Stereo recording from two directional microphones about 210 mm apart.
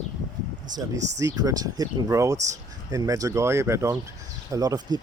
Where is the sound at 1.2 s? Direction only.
15° right (ahead or behind).